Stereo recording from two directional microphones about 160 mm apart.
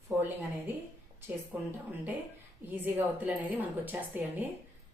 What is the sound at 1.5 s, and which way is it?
A woman's voice, 10° right (ahead or behind).